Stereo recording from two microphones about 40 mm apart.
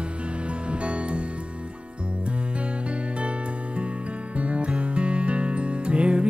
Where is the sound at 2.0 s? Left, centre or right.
Right.